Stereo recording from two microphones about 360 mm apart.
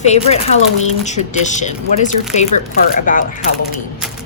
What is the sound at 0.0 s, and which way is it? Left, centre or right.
Speech, centre.